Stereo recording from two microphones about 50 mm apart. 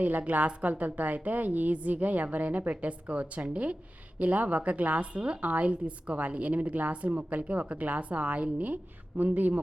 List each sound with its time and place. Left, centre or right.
0.0 s a woman's voice: right